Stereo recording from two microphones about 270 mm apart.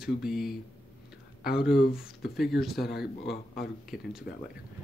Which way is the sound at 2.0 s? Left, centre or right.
Centre.